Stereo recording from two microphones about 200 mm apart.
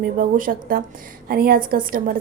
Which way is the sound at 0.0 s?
45° right (ahead or behind).